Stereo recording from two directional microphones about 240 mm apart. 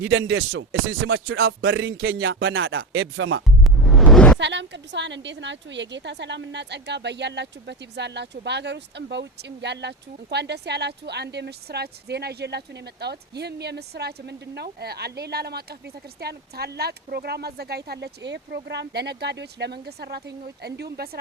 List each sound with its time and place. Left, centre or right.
0.0 s rapping: right
3.6 s music: centre
4.4 s a woman's voice: right